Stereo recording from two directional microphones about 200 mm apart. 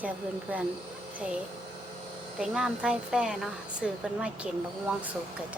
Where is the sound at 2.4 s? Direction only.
5° right (ahead or behind).